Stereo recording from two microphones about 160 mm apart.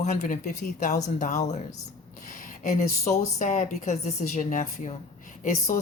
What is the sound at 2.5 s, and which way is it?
A woman's voice, 55° left (ahead or behind).